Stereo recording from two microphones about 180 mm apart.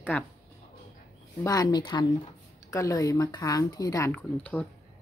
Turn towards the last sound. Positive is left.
turn(degrees=10)  # may be behind; listen again after turning